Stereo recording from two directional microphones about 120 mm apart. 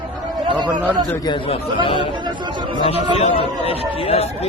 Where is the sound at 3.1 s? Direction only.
55° left (ahead or behind).